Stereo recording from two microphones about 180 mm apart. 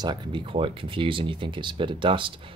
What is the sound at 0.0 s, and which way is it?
Speech, 25° right (ahead or behind).